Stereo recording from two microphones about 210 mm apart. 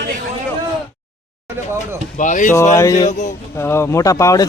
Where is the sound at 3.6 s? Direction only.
10° left (ahead or behind).